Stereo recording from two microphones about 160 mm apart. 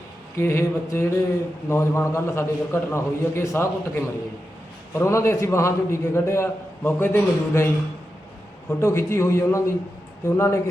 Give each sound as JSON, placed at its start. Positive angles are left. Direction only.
{"t": 0.3, "sound": "a man's voice", "side_deg": 15}
{"t": 8.8, "sound": "a man's voice", "side_deg": 15}